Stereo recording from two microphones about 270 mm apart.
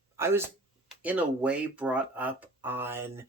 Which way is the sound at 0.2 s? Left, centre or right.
Centre.